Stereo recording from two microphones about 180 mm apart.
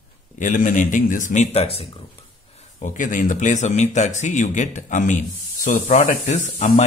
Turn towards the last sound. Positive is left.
turn(degrees=40)  # may be behind; listen again after turning